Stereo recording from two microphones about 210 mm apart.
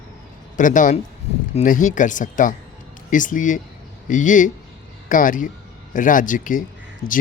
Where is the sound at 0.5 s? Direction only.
40° left (ahead or behind).